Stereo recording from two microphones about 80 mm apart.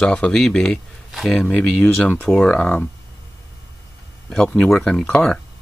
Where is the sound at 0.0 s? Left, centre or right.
Centre.